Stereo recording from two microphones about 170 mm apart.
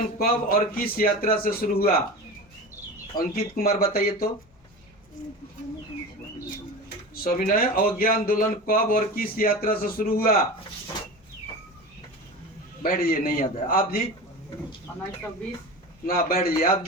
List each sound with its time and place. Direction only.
0.2 s a man's voice: 60° left (ahead or behind)
3.2 s a man's voice: 60° left (ahead or behind)
7.3 s a man's voice: 55° left (ahead or behind)
12.8 s a man's voice: 55° left (ahead or behind)
16.0 s a man's voice: 55° left (ahead or behind)